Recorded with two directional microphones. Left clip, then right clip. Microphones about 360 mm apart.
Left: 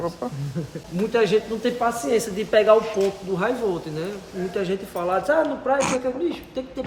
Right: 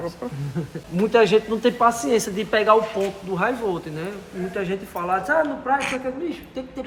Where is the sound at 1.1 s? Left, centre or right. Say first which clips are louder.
Right 3 dB; centre.